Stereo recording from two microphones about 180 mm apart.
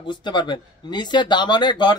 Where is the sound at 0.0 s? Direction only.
25° left (ahead or behind).